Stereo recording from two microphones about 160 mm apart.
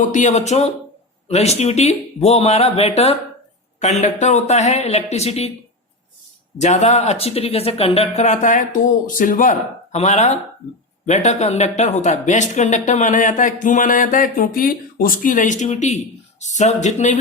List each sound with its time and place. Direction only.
0.1 s speech: 50° left (ahead or behind)
6.6 s speech: 45° left (ahead or behind)